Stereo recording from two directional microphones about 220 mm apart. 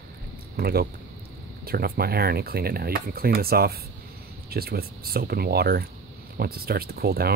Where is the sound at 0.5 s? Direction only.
45° right (ahead or behind).